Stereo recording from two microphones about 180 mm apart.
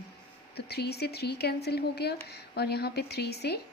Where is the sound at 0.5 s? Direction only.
65° left (ahead or behind).